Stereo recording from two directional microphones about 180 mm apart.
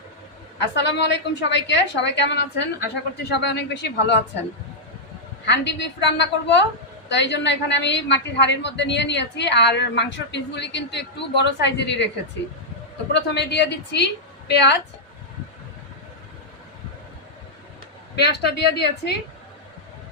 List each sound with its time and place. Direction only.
0.8 s a woman's voice: 80° left
5.5 s a woman's voice: 75° left (ahead or behind)
13.3 s a woman's voice: 70° left (ahead or behind)
18.2 s a woman's voice: 65° left (ahead or behind)